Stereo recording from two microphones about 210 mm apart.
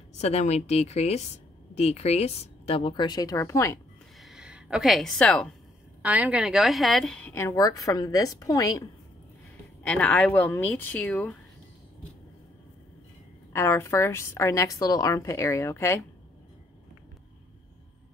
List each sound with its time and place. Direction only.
0.2 s a woman's voice: 30° left (ahead or behind); by 3.8 s 15° left (ahead or behind)
4.2 s a sound: centre (ahead or behind)
6.0 s a woman's voice: 5° right (ahead or behind); by 8.8 s 15° left (ahead or behind)
9.8 s a woman's voice: 5° left (ahead or behind)
13.5 s a woman's voice: 15° left (ahead or behind)